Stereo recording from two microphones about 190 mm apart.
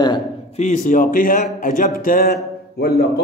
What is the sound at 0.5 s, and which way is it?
Speech, 40° left (ahead or behind).